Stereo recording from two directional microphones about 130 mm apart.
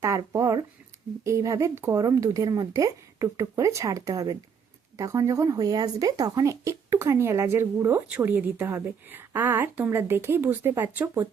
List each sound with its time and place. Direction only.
0.0 s a woman's voice: 25° right (ahead or behind)